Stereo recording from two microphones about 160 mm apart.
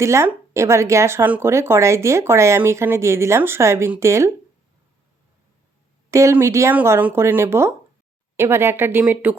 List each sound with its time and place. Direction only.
0.0 s speech: 15° right (ahead or behind)
6.1 s speech: 20° right (ahead or behind)